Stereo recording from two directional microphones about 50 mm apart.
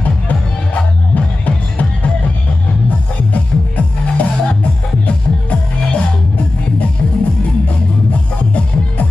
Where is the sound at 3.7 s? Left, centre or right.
Left.